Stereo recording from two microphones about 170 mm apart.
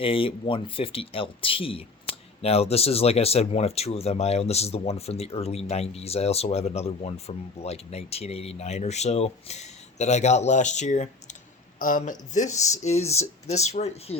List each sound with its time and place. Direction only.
0.0 s speech: 30° left (ahead or behind)